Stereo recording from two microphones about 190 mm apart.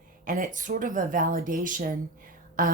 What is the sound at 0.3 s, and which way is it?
A woman's voice, 45° right (ahead or behind).